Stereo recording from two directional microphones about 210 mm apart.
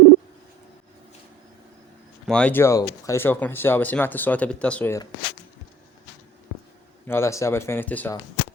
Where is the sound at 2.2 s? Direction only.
5° left (ahead or behind).